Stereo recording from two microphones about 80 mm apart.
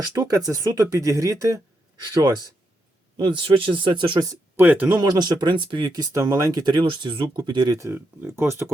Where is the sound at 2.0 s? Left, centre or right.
Right.